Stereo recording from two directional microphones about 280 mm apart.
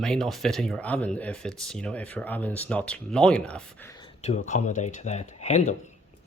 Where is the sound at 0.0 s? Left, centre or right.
Centre.